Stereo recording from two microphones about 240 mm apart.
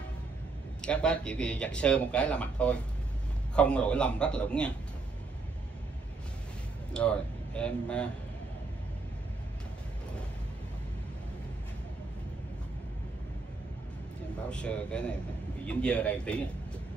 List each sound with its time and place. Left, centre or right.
0.8 s speech: centre
6.9 s a man's voice: centre
14.5 s speech: centre